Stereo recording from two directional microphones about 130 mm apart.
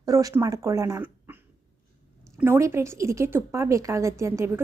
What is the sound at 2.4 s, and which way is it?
A woman's voice, 20° right (ahead or behind).